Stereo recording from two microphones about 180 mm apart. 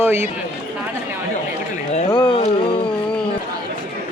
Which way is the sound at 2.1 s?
25° left (ahead or behind).